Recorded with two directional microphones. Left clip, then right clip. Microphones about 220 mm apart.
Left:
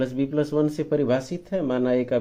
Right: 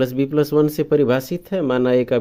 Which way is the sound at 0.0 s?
45° right (ahead or behind).